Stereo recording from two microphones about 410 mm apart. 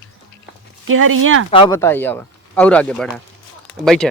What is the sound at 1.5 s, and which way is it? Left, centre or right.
Speech, centre.